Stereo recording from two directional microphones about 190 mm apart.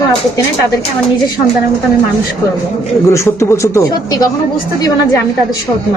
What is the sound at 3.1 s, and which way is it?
A man's voice, 15° left (ahead or behind).